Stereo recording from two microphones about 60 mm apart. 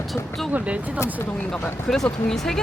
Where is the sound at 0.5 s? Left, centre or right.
Right.